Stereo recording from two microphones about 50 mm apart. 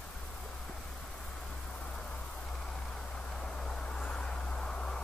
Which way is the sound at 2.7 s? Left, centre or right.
Centre.